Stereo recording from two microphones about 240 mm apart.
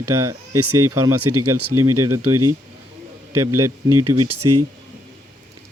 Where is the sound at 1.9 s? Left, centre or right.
Centre.